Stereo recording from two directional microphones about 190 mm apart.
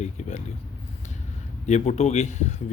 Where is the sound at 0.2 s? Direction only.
35° left (ahead or behind).